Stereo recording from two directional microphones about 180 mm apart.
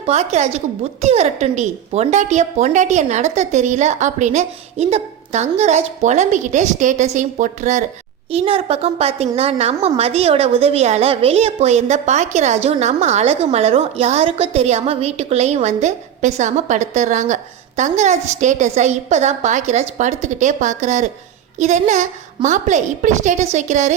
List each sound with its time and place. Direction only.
0.0 s a woman's voice: 35° right (ahead or behind)